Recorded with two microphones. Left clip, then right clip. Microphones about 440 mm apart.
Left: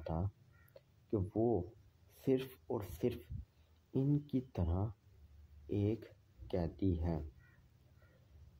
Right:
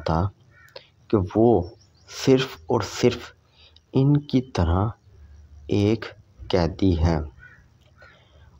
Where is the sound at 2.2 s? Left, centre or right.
Left.